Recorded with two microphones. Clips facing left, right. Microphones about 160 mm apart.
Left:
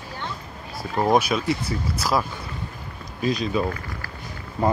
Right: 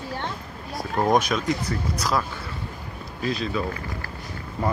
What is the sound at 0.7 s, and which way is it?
Speech, 5° left (ahead or behind).